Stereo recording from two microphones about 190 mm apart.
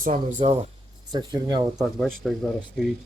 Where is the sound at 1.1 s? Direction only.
20° right (ahead or behind).